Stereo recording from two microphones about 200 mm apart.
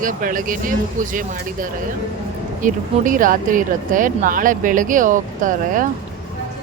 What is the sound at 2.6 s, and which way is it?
Speech, 40° right (ahead or behind).